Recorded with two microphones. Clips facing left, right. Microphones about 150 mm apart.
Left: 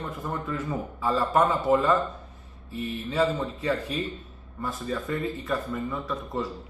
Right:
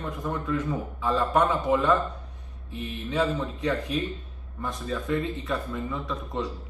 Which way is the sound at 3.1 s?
10° left (ahead or behind).